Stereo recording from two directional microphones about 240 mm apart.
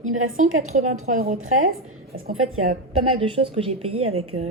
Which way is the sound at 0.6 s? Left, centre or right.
Right.